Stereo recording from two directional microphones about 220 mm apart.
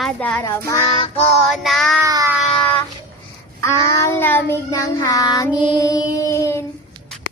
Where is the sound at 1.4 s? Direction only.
Centre (ahead or behind).